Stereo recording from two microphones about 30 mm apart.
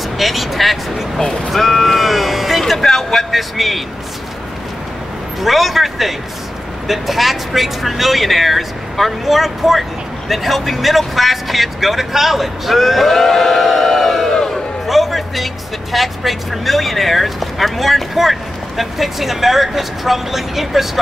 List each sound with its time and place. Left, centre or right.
0.2 s speech: centre
1.5 s a sound: centre
2.6 s vehicle: centre
3.3 s a man's voice: centre
5.4 s speech: centre